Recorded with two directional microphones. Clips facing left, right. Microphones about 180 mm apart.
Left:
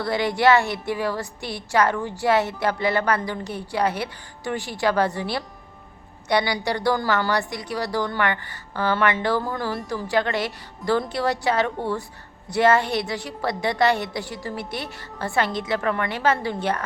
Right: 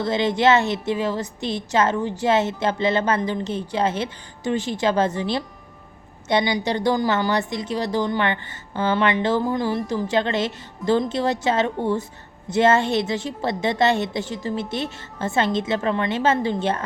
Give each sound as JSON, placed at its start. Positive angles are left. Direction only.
{"t": 0.0, "sound": "a woman's voice", "side_deg": -20}